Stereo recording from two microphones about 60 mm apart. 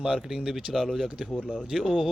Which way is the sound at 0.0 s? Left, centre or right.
Centre.